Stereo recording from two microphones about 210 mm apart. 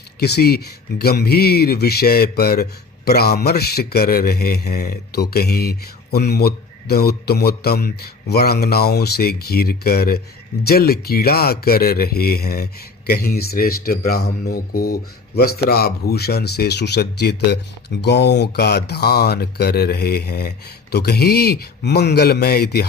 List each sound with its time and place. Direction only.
0.2 s speech: 50° left (ahead or behind)